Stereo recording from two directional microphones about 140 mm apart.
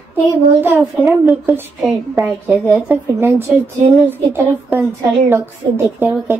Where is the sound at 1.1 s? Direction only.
15° right (ahead or behind).